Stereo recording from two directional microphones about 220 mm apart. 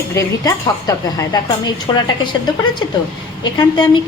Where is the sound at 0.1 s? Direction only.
15° left (ahead or behind).